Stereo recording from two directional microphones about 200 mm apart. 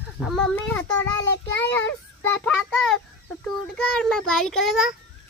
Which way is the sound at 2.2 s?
5° left (ahead or behind).